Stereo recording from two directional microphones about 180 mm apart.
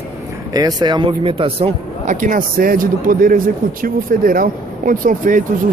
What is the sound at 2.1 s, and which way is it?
Speech, 45° right (ahead or behind).